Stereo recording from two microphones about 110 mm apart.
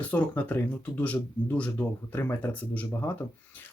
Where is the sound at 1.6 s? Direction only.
15° left (ahead or behind).